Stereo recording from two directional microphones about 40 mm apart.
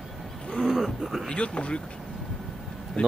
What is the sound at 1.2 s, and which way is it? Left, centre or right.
Speech, left.